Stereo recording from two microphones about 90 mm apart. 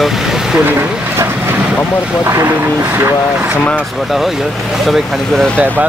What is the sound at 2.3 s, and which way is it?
Speech, 30° right (ahead or behind).